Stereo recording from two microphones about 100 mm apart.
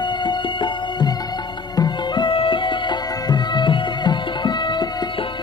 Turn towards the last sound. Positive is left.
turn(degrees=45)  # may be behind; listen again after turning